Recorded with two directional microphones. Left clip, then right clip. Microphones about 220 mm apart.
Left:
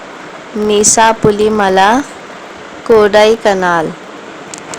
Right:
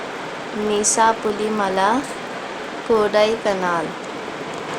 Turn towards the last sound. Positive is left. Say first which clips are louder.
# left 9 dB
turn(degrees=35)  # may be behind; listen again after turning